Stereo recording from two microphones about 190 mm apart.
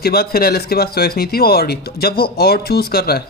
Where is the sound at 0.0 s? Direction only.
55° left (ahead or behind).